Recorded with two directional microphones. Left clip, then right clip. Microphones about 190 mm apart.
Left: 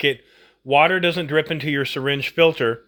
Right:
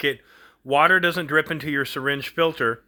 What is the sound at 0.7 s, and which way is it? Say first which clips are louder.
Speech: left 1 dB; 10° right (ahead or behind).